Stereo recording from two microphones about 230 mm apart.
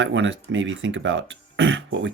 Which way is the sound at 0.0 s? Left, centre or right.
Right.